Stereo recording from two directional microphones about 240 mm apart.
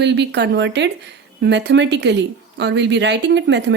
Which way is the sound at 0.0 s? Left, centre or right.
Right.